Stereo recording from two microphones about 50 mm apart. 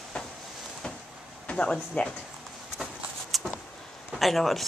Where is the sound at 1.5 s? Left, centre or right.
Left.